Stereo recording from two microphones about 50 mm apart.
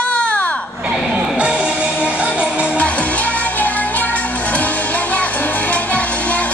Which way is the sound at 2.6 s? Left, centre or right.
Left.